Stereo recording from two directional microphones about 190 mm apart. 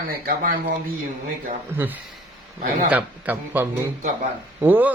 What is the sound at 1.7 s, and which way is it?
A man's voice, 10° right (ahead or behind).